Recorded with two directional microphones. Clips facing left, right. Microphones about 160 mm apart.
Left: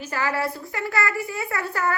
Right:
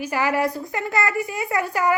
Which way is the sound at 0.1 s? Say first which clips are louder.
Right 3 dB; 15° right (ahead or behind).